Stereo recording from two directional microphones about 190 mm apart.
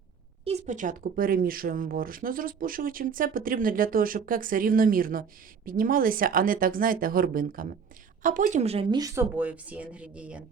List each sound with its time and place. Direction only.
0.6 s speech: 45° right (ahead or behind); by 10.4 s 5° right (ahead or behind)